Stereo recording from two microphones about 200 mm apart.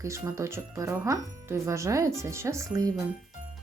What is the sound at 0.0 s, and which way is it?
Speech, 15° right (ahead or behind).